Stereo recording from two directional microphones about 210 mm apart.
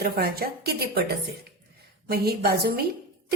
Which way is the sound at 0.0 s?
45° right (ahead or behind).